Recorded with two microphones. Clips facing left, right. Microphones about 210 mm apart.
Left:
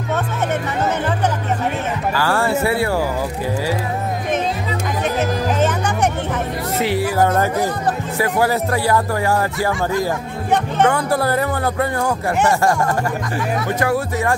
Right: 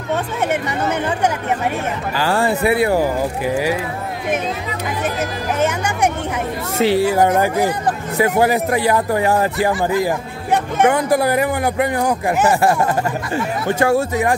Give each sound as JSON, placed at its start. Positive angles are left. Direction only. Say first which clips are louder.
{"t": 2.1, "sound": "speech", "louder": "right 1 dB", "side_deg": -20}
{"t": 6.8, "sound": "speech", "louder": "right 4 dB", "side_deg": -25}
{"t": 13.7, "sound": "speech", "louder": "right 6 dB", "side_deg": -25}